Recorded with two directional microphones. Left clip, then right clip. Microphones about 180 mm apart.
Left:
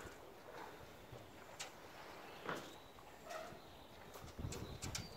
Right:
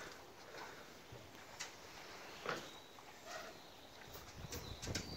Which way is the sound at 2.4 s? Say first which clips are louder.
Right 2 dB; 45° right (ahead or behind).